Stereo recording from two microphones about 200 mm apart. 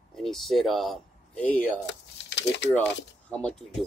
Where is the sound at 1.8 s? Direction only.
60° left (ahead or behind).